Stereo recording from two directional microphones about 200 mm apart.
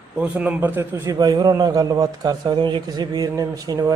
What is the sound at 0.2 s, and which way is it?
A man's voice, 5° right (ahead or behind).